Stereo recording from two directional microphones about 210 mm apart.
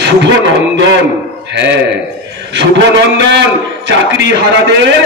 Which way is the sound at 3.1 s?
55° right (ahead or behind).